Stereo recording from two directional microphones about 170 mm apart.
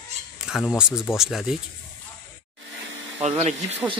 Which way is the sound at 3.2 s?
40° right (ahead or behind).